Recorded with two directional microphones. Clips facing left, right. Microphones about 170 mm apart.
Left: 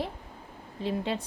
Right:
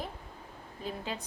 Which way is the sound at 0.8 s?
30° left (ahead or behind).